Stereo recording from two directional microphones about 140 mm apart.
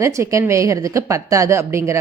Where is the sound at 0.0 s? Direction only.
20° right (ahead or behind).